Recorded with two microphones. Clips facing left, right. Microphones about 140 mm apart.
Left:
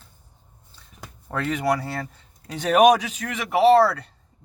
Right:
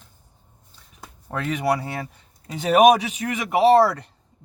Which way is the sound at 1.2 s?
10° right (ahead or behind).